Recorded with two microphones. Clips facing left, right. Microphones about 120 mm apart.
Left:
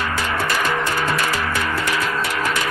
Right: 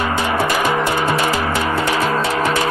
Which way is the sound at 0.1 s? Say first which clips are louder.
Right 4 dB; 15° right (ahead or behind).